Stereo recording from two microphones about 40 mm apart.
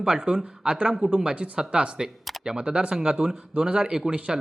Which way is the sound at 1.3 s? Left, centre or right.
Right.